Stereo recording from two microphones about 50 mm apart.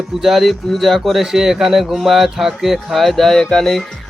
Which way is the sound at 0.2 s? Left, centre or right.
Centre.